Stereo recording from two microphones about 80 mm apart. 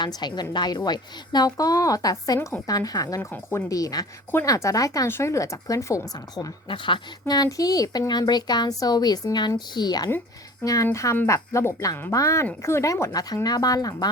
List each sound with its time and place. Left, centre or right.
0.0 s speech: left
5.0 s speech: left
6.1 s speech: left
7.3 s speech: left
10.6 s speech: left
13.1 s speech: left